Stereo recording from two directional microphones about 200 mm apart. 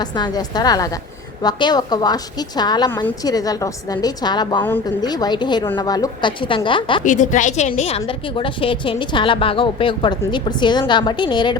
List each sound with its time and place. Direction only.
0.0 s a woman's voice: 20° left (ahead or behind)
7.0 s a woman's voice: 40° left (ahead or behind); by 11.5 s 20° left (ahead or behind)